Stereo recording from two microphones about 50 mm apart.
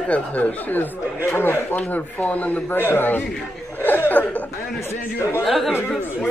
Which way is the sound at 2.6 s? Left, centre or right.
Left.